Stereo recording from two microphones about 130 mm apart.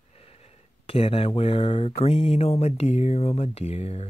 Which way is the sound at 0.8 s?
45° left (ahead or behind).